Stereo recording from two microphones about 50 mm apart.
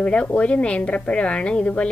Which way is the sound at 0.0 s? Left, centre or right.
Left.